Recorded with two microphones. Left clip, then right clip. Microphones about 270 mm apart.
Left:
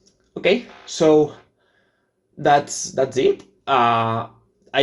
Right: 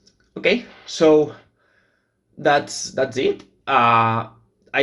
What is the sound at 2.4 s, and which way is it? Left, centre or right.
Speech, centre.